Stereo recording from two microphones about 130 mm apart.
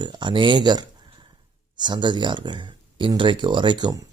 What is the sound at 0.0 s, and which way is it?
Speech, 35° right (ahead or behind).